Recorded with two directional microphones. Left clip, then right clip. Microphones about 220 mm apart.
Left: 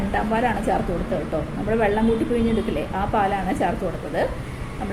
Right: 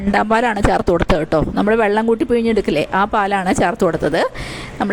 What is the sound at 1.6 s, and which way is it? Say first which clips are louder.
A woman's voice: right 4 dB; 50° right (ahead or behind).